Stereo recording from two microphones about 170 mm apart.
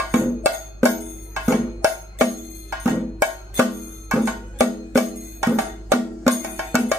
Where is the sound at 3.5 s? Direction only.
15° right (ahead or behind).